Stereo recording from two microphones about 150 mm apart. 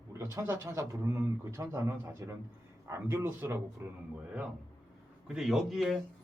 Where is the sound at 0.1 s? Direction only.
20° right (ahead or behind).